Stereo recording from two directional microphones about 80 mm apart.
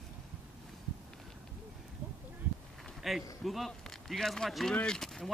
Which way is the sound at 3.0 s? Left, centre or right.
Centre.